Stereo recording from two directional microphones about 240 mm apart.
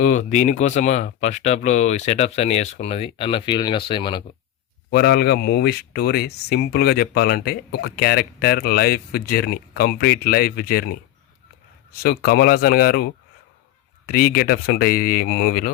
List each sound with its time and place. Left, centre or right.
0.1 s speech: left
4.9 s speech: left
12.0 s speech: left
14.1 s speech: left